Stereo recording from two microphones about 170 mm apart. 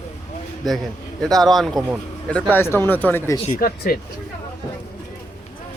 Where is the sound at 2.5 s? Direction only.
15° left (ahead or behind).